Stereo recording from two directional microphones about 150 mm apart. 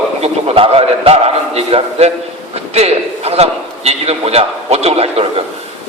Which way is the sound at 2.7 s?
45° right (ahead or behind).